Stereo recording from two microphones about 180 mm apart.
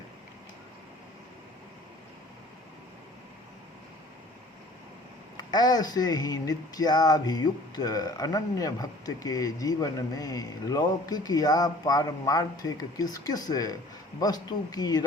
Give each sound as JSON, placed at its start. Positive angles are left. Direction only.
{"t": 5.4, "sound": "speech", "side_deg": 20}